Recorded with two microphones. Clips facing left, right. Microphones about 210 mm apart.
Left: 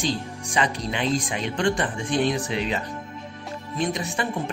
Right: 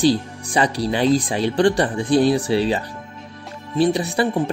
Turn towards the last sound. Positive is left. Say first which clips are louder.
# right 7 dB
turn(degrees=-35)  # may be behind; listen again after turning